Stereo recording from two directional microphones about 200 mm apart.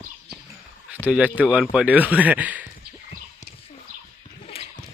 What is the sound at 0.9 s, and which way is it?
Speech, 5° right (ahead or behind).